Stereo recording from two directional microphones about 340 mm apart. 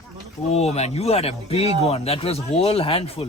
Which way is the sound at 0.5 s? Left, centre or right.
Centre.